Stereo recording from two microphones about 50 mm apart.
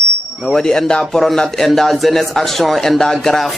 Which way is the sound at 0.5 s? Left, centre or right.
Centre.